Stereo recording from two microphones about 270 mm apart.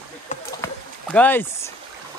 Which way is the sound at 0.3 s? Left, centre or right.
Left.